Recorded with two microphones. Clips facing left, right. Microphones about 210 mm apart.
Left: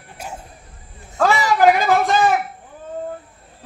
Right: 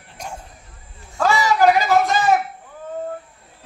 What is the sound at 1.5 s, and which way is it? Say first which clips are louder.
Speech: left 1 dB; 50° left (ahead or behind).